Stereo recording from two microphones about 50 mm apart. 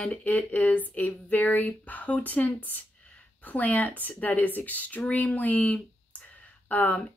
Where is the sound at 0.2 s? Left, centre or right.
Left.